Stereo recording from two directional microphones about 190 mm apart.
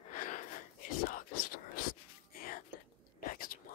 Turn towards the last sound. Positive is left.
turn(degrees=50)  # may be behind; listen again after turning